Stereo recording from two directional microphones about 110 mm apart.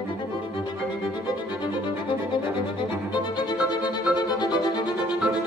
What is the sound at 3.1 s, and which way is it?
Violin, 40° left (ahead or behind).